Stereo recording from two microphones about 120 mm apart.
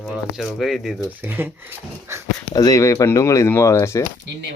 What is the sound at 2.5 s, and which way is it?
Speech, 30° left (ahead or behind).